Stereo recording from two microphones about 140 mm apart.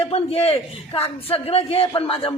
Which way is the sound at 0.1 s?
45° left (ahead or behind).